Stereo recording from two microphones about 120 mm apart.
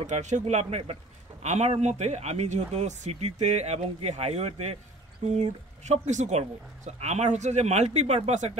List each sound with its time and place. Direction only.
0.0 s speech: 80° right; by 4.7 s 60° right (ahead or behind)
5.2 s speech: 75° right (ahead or behind)